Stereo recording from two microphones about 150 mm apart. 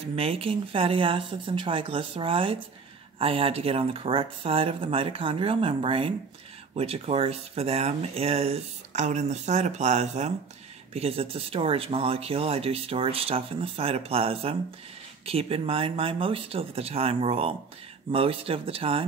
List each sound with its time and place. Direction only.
0.1 s speech: 40° right (ahead or behind)